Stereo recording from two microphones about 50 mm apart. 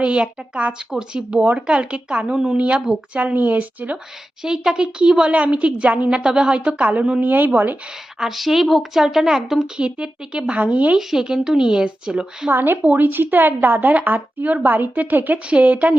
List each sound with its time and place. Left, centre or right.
0.0 s speech: right
2.6 s a woman's voice: right
4.4 s speech: centre
6.7 s a woman's voice: right
8.2 s a woman's voice: centre; by 10.9 s right
10.9 s speech: centre
12.5 s a woman's voice: right